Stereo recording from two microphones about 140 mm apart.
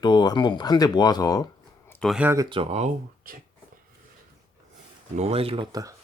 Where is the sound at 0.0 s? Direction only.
30° left (ahead or behind).